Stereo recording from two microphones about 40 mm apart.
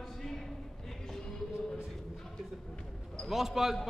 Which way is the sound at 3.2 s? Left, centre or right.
Centre.